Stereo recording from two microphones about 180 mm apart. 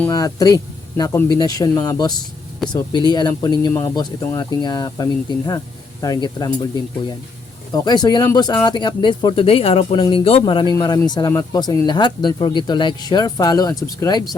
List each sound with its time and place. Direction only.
0.1 s speech: 20° left (ahead or behind)
2.6 s speech: centre (ahead or behind)
3.1 s speech: 20° left (ahead or behind)